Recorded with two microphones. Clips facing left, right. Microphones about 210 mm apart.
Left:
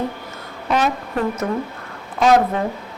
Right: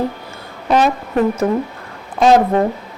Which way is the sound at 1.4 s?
40° right (ahead or behind).